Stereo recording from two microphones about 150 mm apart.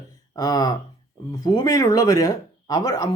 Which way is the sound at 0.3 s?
25° left (ahead or behind).